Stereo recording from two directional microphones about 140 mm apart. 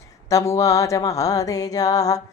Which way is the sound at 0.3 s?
20° left (ahead or behind).